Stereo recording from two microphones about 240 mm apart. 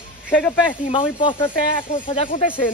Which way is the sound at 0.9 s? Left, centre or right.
Left.